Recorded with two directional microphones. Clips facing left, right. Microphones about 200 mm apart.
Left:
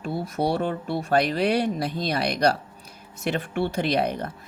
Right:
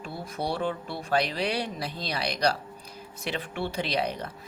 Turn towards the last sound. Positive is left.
turn(degrees=50)  # may be behind; listen again after turning